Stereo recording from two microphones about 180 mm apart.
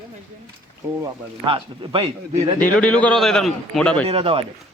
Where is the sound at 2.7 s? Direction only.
5° left (ahead or behind).